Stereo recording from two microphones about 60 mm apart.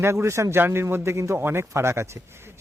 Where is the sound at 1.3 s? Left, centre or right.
Right.